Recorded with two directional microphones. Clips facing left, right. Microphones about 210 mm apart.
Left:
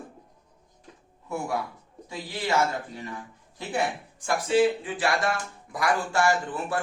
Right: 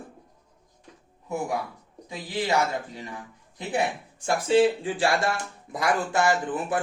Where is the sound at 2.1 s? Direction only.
15° right (ahead or behind).